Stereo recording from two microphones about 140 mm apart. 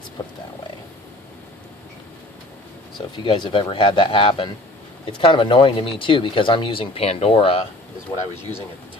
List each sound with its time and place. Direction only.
3.2 s speech: 35° left (ahead or behind)